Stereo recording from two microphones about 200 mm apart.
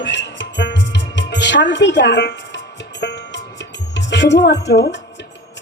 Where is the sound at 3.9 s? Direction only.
60° left (ahead or behind).